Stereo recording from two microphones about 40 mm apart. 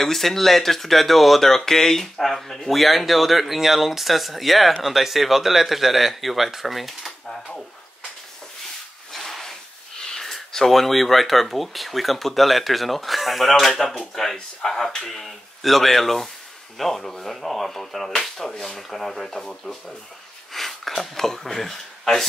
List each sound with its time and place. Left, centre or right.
0.0 s speech: centre
9.1 s a sound: centre
10.5 s speech: centre